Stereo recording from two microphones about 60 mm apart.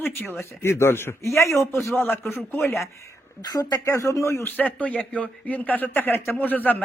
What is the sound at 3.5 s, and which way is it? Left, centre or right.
Speech, left.